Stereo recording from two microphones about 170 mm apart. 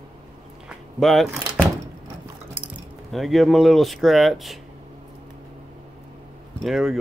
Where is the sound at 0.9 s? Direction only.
Centre (ahead or behind).